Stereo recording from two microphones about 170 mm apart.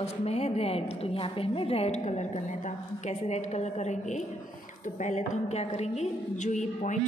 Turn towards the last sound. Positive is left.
turn(degrees=45)  # may be behind; listen again after turning